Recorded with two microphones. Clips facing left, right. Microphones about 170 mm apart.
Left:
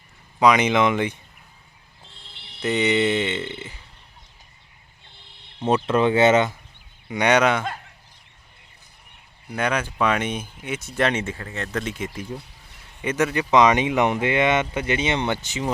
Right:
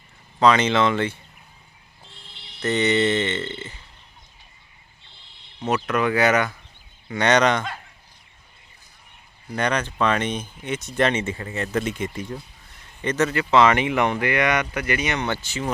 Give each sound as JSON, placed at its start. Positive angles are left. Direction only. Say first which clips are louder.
{"t": 0.3, "sound": "speech", "louder": "even", "side_deg": 15}
{"t": 2.6, "sound": "speech", "louder": "even", "side_deg": 10}
{"t": 5.6, "sound": "speech", "louder": "left 3 dB", "side_deg": 30}
{"t": 7.1, "sound": "speech", "louder": "even", "side_deg": 10}
{"t": 9.5, "sound": "speech", "louder": "even", "side_deg": 5}